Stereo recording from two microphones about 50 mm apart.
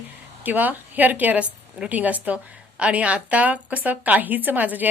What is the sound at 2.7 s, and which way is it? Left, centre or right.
A woman's voice, right.